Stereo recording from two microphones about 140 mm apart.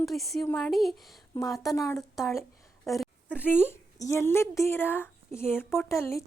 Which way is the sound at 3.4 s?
15° left (ahead or behind).